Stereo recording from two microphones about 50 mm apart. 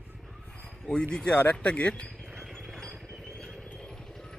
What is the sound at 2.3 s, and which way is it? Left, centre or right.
Vehicle, centre.